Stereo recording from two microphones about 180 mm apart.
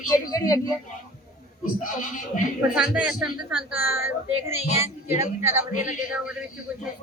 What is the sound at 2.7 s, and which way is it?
A woman's voice, 5° right (ahead or behind).